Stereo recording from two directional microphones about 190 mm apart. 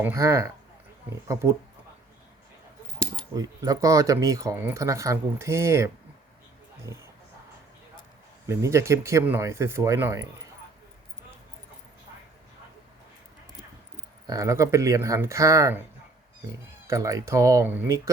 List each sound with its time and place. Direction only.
0.0 s speech: 15° right (ahead or behind)
3.2 s speech: 20° right (ahead or behind)
8.4 s speech: 15° right (ahead or behind)
14.3 s speech: 15° right (ahead or behind)